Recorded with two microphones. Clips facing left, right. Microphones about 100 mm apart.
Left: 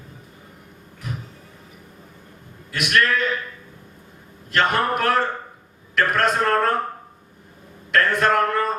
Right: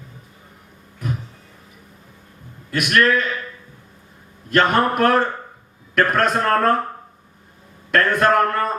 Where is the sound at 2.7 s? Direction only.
50° right (ahead or behind).